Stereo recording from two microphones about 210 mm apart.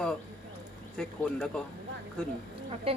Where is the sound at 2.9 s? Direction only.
25° right (ahead or behind).